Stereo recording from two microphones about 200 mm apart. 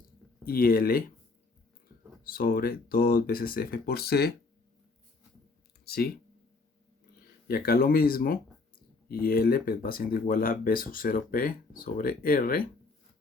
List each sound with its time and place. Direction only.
0.4 s speech: 50° left (ahead or behind)
2.2 s speech: 45° left (ahead or behind)
5.8 s speech: 50° left (ahead or behind)
7.4 s speech: 50° left (ahead or behind)